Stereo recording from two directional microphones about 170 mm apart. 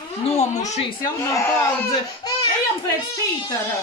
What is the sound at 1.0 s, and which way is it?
Speech, 15° left (ahead or behind).